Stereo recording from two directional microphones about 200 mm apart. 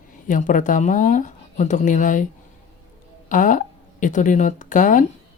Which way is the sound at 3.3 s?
40° left (ahead or behind).